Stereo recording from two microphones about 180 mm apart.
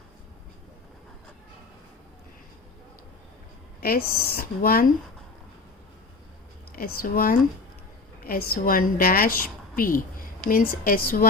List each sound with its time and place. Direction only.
3.8 s a woman's voice: 55° left (ahead or behind)
6.7 s a woman's voice: 55° left (ahead or behind)